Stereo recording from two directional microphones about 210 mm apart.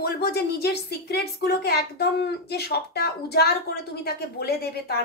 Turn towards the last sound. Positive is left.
turn(degrees=50)  # may be behind; listen again after turning